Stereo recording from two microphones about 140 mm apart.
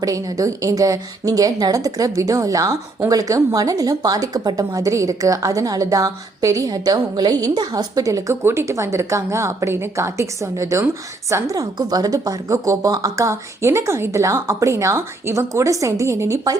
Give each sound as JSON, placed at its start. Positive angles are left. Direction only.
{"t": 0.0, "sound": "a woman's voice", "side_deg": -25}